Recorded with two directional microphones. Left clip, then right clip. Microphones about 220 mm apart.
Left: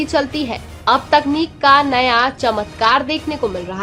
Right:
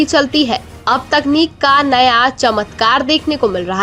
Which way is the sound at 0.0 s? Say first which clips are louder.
Right 6 dB; 25° right (ahead or behind).